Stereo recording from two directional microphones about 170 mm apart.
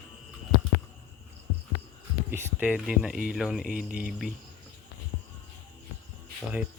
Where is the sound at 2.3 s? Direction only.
10° right (ahead or behind).